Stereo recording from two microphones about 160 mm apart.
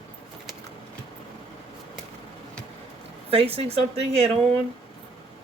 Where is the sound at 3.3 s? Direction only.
35° right (ahead or behind).